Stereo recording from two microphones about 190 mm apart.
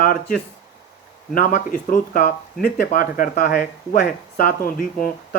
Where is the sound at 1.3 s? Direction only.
45° left (ahead or behind).